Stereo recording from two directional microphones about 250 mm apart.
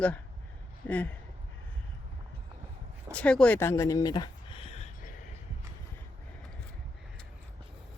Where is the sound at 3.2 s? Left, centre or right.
Centre; by 5.1 s left.